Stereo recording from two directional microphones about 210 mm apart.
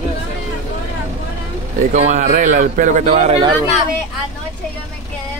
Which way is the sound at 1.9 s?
35° right (ahead or behind).